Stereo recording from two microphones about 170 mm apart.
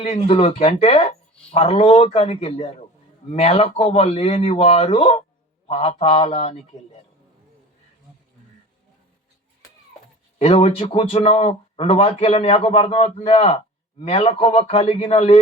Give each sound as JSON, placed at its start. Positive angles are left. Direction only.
{"t": 0.0, "sound": "speech", "side_deg": 40}
{"t": 10.3, "sound": "speech", "side_deg": 35}